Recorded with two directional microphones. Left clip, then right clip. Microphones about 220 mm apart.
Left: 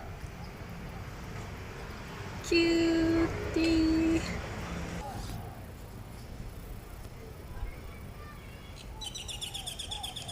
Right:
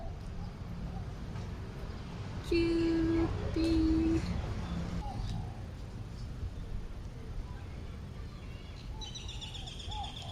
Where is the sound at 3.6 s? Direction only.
10° left (ahead or behind).